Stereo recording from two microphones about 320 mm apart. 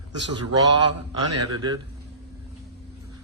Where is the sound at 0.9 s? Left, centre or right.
Right.